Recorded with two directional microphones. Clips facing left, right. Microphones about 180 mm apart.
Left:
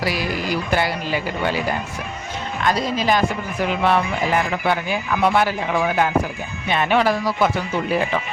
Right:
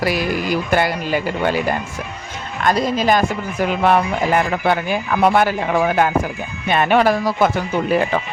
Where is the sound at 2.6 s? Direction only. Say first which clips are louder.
Right 4 dB; 50° right (ahead or behind).